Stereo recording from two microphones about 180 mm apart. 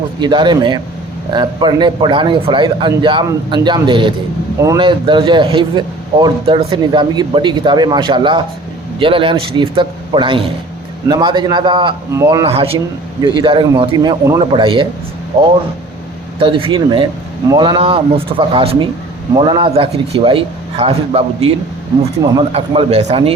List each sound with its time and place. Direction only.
0.2 s a man's voice: 25° right (ahead or behind)
16.4 s a man's voice: 30° right (ahead or behind)